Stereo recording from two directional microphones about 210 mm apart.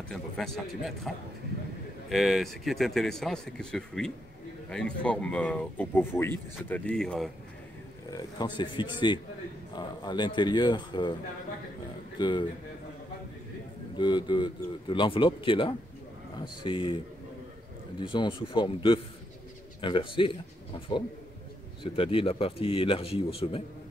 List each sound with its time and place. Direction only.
0.1 s speech: centre (ahead or behind)
8.1 s a man's voice: 20° left (ahead or behind)
12.2 s speech: 20° left (ahead or behind)
13.9 s speech: 20° left (ahead or behind)
18.0 s speech: 25° left (ahead or behind)